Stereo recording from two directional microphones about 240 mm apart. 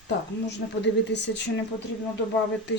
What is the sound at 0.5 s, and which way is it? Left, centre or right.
Speech, left.